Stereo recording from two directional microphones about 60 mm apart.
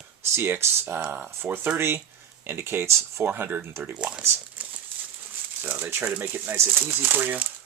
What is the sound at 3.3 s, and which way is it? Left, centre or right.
Speech, right.